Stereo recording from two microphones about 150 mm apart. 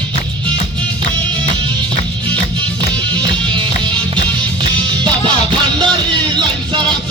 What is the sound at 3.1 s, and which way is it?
Music, 30° right (ahead or behind).